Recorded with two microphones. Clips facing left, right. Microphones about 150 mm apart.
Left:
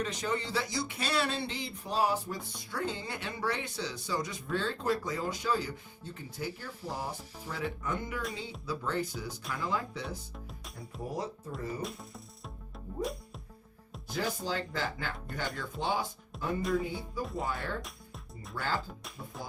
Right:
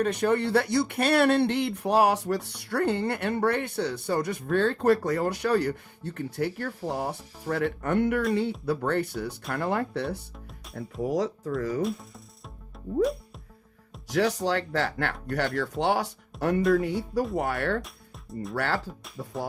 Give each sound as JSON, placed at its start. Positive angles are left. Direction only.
{"t": 0.0, "sound": "speech", "side_deg": -60}
{"t": 11.0, "sound": "speech", "side_deg": -90}
{"t": 11.8, "sound": "speech", "side_deg": 0}
{"t": 14.1, "sound": "speech", "side_deg": -80}